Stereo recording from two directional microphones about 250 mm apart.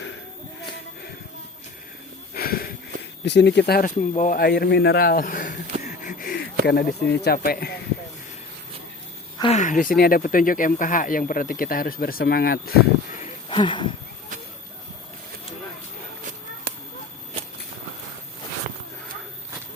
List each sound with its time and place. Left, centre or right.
2.3 s sniff: left
3.2 s speech: left
9.4 s speech: left
13.2 s a sound: centre